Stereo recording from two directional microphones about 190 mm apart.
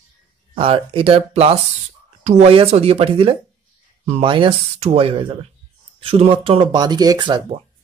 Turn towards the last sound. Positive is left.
turn(degrees=-20)  # may be behind; listen again after turning